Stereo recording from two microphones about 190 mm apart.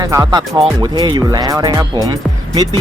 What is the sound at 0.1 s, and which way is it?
Speech, 20° right (ahead or behind).